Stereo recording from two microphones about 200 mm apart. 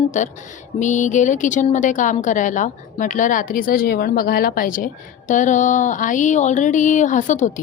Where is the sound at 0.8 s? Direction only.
40° left (ahead or behind).